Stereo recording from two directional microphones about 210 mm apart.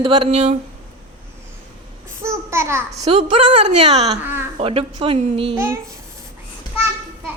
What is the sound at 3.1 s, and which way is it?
A woman's voice, 25° right (ahead or behind).